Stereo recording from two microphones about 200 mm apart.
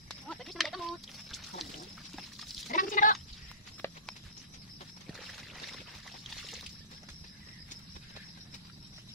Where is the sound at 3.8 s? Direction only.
10° left (ahead or behind).